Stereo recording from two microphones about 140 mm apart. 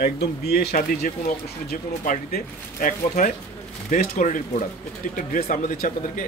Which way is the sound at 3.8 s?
65° left (ahead or behind).